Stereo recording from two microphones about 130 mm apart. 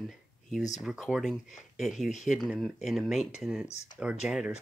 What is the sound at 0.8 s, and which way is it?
Speech, 5° right (ahead or behind).